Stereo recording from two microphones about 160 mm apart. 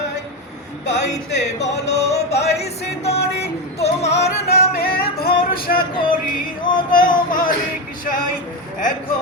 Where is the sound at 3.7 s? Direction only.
40° left (ahead or behind).